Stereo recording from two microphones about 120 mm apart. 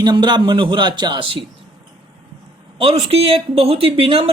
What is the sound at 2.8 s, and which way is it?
Speech, 55° right (ahead or behind).